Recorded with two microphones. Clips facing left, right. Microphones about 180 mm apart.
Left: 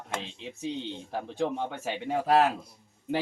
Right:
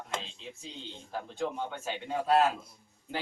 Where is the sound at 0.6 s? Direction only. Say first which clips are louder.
Left 11 dB; 70° left (ahead or behind).